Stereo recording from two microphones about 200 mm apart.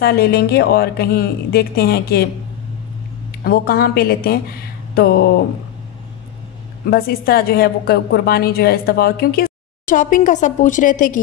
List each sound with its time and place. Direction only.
0.0 s a woman's voice: 50° left (ahead or behind)
3.3 s a woman's voice: 50° left (ahead or behind)
6.9 s a woman's voice: 50° left (ahead or behind)